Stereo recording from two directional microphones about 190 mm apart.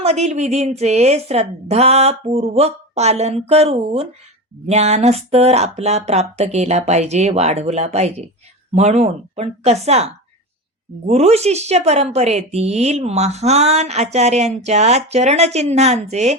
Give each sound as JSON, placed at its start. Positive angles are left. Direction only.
{"t": 0.0, "sound": "a woman's voice", "side_deg": -35}